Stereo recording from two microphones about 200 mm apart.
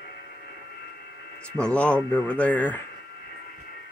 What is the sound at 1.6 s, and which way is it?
A man's voice, 5° left (ahead or behind).